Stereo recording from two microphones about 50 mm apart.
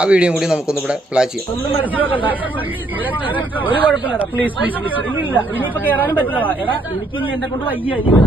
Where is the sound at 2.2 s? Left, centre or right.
Right.